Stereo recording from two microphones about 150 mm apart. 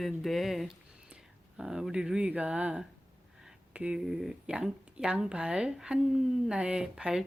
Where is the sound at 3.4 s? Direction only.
5° right (ahead or behind).